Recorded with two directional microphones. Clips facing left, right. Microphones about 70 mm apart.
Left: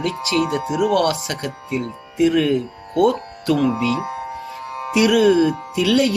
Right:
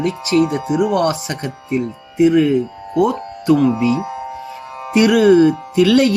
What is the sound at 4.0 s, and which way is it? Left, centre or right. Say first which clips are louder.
Music: right 2 dB; centre.